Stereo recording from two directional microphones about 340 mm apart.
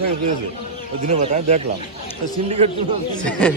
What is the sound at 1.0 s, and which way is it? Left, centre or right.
Speech, right.